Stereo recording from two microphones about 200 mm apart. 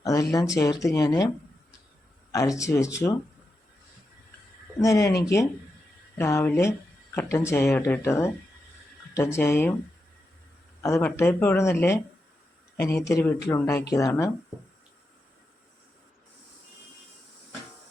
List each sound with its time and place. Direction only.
0.0 s speech: 15° left (ahead or behind)
2.3 s speech: 15° left (ahead or behind)
4.8 s speech: 15° left (ahead or behind)
10.8 s speech: 15° left (ahead or behind)